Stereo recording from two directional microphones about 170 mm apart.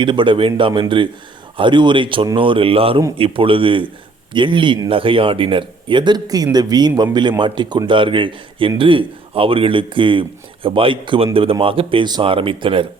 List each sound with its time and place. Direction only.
0.0 s speech: 30° right (ahead or behind)